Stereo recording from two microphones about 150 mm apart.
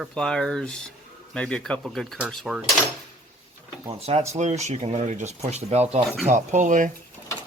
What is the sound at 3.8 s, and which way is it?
Speech, 40° right (ahead or behind).